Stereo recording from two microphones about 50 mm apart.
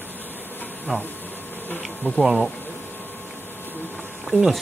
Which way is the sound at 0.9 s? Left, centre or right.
Right.